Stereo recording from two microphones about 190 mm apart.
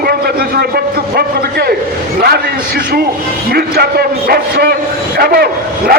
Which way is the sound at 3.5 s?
55° right (ahead or behind).